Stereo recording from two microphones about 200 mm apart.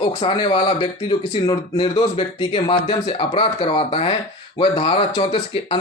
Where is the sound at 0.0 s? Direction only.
25° left (ahead or behind).